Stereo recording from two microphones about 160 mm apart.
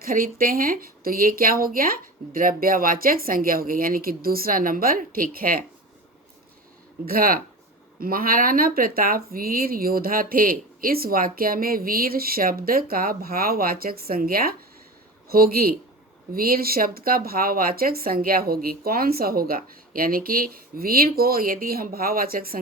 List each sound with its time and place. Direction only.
0.0 s speech: 65° right (ahead or behind)
7.0 s speech: 70° right (ahead or behind)